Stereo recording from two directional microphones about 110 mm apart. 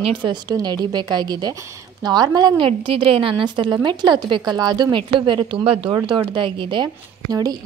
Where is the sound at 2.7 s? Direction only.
55° right (ahead or behind).